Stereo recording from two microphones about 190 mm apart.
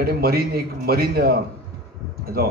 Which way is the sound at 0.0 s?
55° right (ahead or behind).